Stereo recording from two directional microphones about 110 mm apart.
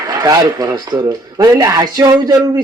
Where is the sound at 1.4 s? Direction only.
35° right (ahead or behind).